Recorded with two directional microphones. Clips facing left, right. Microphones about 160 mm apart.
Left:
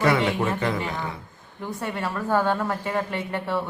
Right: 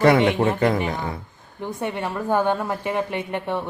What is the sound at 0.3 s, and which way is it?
Speech, 35° right (ahead or behind).